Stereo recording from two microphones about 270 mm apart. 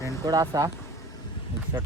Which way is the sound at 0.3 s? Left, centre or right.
Centre.